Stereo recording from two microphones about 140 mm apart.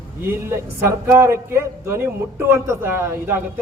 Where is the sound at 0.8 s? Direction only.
20° right (ahead or behind).